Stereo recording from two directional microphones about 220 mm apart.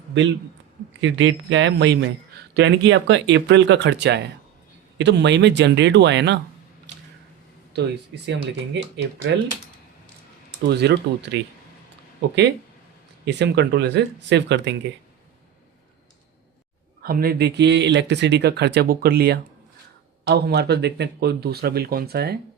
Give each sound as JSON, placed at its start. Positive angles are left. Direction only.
{"t": 1.0, "sound": "speech", "side_deg": -60}
{"t": 7.7, "sound": "speech", "side_deg": -50}
{"t": 10.7, "sound": "speech", "side_deg": -50}
{"t": 13.2, "sound": "speech", "side_deg": -50}
{"t": 17.0, "sound": "speech", "side_deg": -40}